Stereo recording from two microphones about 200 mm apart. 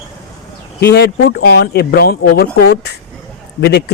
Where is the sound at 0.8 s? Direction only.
55° left (ahead or behind).